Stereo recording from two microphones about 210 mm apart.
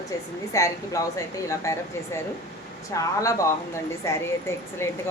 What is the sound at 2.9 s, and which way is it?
A woman's voice, 15° left (ahead or behind).